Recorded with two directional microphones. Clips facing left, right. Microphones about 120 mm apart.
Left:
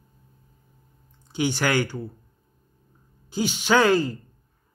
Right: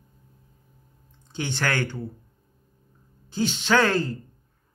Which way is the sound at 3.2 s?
10° left (ahead or behind).